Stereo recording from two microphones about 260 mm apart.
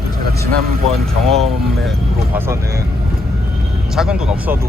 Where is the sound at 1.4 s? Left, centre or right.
Centre.